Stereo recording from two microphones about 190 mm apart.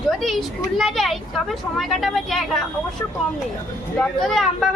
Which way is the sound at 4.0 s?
Centre (ahead or behind).